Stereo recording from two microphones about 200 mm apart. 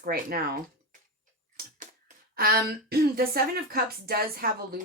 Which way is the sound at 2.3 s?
50° right (ahead or behind).